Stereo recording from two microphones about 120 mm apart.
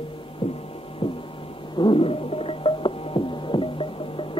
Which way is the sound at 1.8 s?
50° left (ahead or behind).